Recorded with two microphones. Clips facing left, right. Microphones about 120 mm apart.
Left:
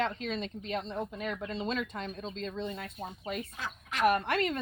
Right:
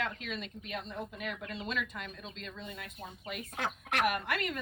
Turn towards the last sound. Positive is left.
turn(degrees=30)  # may be behind; listen again after turning